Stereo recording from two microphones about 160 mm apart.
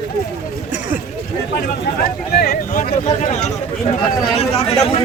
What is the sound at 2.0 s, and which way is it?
Speech, 70° left (ahead or behind).